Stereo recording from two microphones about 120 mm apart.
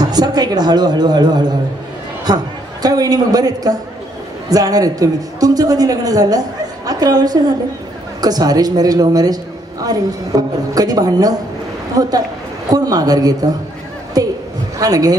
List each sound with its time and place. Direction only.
0.0 s a man's voice: 35° right (ahead or behind)